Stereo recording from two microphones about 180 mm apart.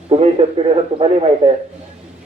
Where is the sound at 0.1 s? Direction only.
30° right (ahead or behind).